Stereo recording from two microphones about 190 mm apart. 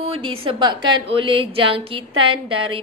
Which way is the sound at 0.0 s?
25° right (ahead or behind).